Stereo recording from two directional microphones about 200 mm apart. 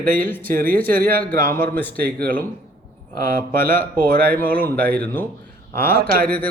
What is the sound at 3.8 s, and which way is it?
Speech, 50° right (ahead or behind).